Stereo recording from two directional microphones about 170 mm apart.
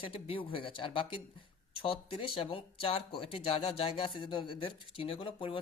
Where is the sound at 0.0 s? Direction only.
30° left (ahead or behind).